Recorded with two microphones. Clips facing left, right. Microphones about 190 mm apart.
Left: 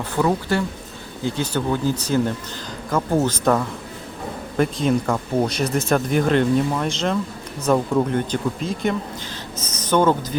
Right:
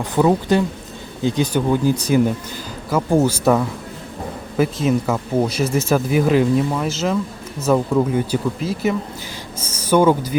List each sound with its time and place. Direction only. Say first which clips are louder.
0.0 s speech: right 4 dB; 20° right (ahead or behind)